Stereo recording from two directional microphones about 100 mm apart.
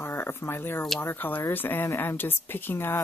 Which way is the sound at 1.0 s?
20° left (ahead or behind).